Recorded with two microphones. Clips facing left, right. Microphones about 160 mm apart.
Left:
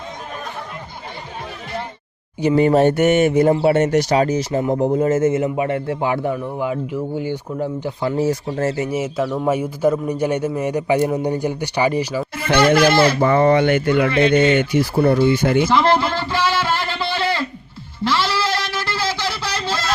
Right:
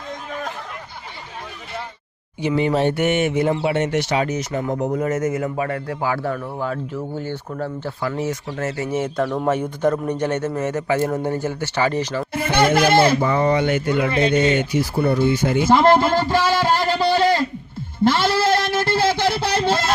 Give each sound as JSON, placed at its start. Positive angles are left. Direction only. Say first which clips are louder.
{"t": 2.4, "sound": "a man's voice", "louder": "left 5 dB", "side_deg": 45}
{"t": 8.1, "sound": "speech", "louder": "left 5 dB", "side_deg": 35}
{"t": 8.8, "sound": "a man's voice", "louder": "left 1 dB", "side_deg": 10}
{"t": 13.2, "sound": "speech", "louder": "left 4 dB", "side_deg": 55}
{"t": 15.6, "sound": "speech", "louder": "right 2 dB", "side_deg": -45}
{"t": 18.0, "sound": "music", "louder": "right 3 dB", "side_deg": -50}